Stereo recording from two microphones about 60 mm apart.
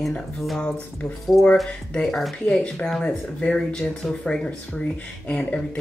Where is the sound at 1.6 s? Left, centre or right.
Centre.